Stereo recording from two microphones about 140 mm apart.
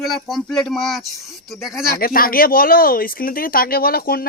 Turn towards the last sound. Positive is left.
turn(degrees=90)